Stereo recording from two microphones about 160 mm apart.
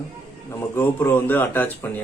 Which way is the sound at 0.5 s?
15° left (ahead or behind).